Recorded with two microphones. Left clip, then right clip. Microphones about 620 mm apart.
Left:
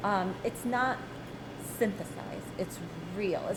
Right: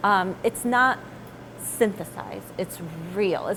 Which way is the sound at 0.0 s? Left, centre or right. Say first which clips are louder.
Right 9 dB; right.